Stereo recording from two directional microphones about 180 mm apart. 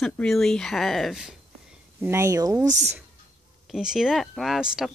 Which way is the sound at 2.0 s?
15° right (ahead or behind).